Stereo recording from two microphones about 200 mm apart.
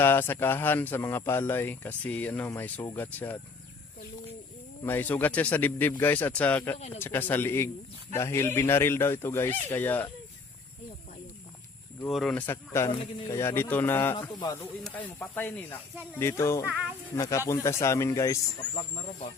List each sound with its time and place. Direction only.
0.0 s speech: 10° left (ahead or behind)
4.8 s speech: 10° left (ahead or behind)
6.7 s speech: 30° left (ahead or behind)
7.0 s speech: 10° left (ahead or behind)
12.0 s speech: centre (ahead or behind)
12.9 s speech: 25° left (ahead or behind)
14.2 s speech: 20° left (ahead or behind)
14.6 s speech: 10° left (ahead or behind)
18.6 s speech: 65° right (ahead or behind)